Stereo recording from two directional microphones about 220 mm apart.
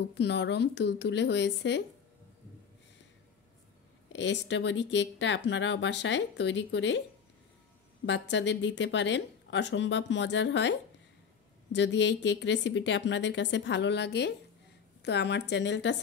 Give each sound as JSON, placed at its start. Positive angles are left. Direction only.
{"t": 0.1, "sound": "speech", "side_deg": 50}
{"t": 4.1, "sound": "speech", "side_deg": 55}
{"t": 8.0, "sound": "speech", "side_deg": 55}